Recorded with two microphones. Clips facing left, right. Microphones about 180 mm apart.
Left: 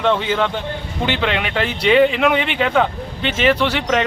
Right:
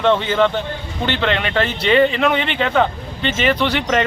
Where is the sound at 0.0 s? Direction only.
5° left (ahead or behind).